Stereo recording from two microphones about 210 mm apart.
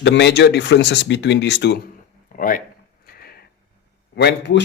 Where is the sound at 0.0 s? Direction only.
55° left (ahead or behind).